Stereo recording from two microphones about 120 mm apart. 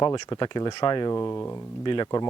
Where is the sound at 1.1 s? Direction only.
20° left (ahead or behind).